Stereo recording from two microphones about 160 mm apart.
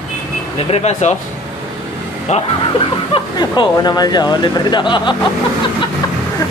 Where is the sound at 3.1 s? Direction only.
25° left (ahead or behind).